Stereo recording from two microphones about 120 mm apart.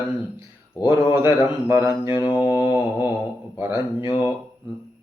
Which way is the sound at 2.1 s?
40° left (ahead or behind).